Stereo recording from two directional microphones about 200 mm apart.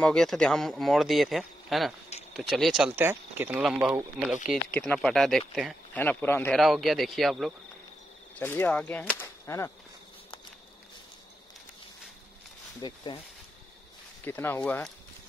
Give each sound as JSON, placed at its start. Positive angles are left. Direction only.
{"t": 0.0, "sound": "speech", "side_deg": 5}
{"t": 3.0, "sound": "speech", "side_deg": -10}
{"t": 12.8, "sound": "speech", "side_deg": 25}
{"t": 14.2, "sound": "speech", "side_deg": 10}